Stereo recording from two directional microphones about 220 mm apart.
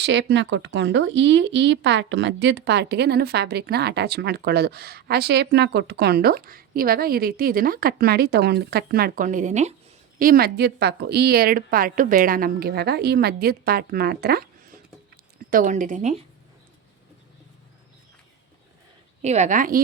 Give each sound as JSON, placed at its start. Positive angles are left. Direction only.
{"t": 0.0, "sound": "speech", "side_deg": -55}
{"t": 10.2, "sound": "speech", "side_deg": -40}
{"t": 19.2, "sound": "a woman's voice", "side_deg": -30}